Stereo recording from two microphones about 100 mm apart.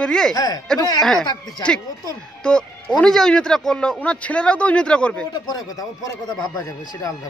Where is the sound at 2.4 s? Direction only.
10° left (ahead or behind).